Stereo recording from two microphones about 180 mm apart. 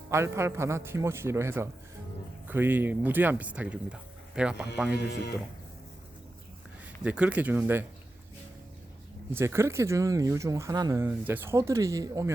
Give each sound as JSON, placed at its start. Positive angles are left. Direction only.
{"t": 0.1, "sound": "speech", "side_deg": -15}
{"t": 4.9, "sound": "speech", "side_deg": 65}
{"t": 7.0, "sound": "speech", "side_deg": -5}
{"t": 9.3, "sound": "speech", "side_deg": -15}